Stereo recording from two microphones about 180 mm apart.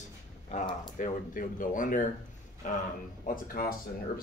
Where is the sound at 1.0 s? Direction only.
45° left (ahead or behind).